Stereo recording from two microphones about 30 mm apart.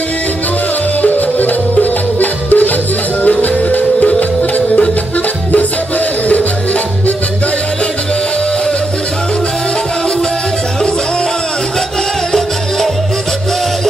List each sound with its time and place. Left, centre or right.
1.0 s music: left
4.2 s music: left
6.2 s music: left
12.3 s music: centre